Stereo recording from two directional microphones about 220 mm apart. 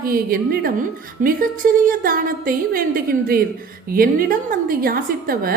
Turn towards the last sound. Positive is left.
turn(degrees=-40)  # may be behind; listen again after turning